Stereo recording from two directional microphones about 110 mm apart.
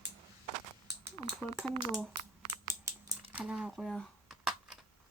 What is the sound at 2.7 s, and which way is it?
Typing, 30° right (ahead or behind).